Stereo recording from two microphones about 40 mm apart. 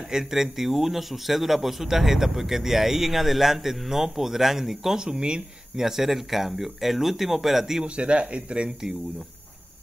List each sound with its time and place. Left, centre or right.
0.1 s a man's voice: centre
4.9 s speech: right
5.8 s a man's voice: centre
7.8 s speech: right